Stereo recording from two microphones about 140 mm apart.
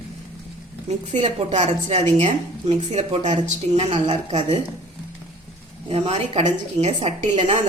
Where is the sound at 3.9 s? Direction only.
40° right (ahead or behind).